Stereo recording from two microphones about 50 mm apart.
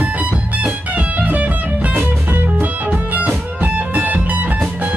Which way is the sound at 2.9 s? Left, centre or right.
Right.